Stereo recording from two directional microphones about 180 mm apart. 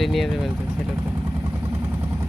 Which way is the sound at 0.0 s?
Centre (ahead or behind).